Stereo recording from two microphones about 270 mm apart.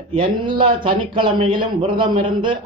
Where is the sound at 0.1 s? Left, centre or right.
Centre.